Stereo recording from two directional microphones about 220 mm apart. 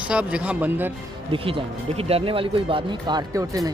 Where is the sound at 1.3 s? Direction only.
25° right (ahead or behind).